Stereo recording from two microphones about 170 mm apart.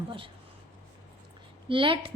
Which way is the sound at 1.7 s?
30° right (ahead or behind).